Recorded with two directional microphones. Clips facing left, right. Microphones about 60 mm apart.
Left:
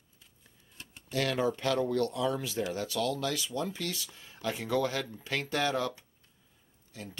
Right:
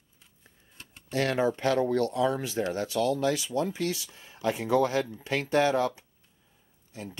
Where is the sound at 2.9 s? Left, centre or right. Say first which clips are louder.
Right 5 dB; right.